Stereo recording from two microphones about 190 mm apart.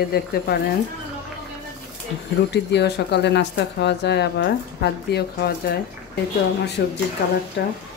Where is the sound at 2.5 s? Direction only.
65° left (ahead or behind).